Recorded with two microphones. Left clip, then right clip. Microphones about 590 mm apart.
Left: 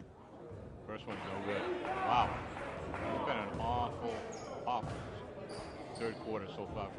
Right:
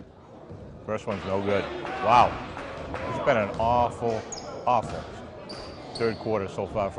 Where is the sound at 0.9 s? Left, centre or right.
Right.